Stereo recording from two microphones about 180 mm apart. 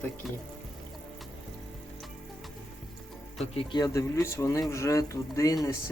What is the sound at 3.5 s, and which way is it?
Speech, 20° left (ahead or behind).